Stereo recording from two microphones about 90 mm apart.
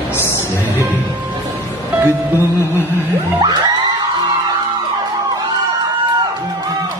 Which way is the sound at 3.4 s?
55° right (ahead or behind).